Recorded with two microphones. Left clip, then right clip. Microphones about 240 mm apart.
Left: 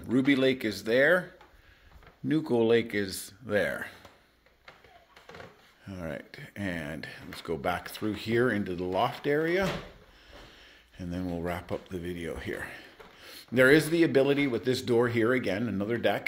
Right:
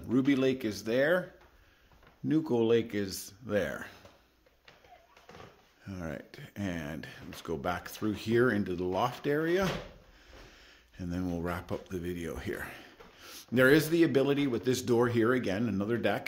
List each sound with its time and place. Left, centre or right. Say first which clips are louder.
0.1 s speech: left 3 dB; centre
2.2 s speech: left 2 dB; centre
5.9 s speech: left 3 dB; centre